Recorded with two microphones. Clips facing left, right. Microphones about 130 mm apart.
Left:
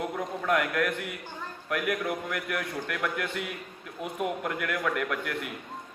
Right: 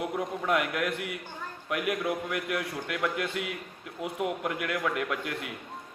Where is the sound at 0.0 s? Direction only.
20° right (ahead or behind).